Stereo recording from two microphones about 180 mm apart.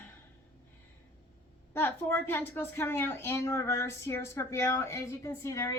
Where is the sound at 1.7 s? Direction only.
10° left (ahead or behind).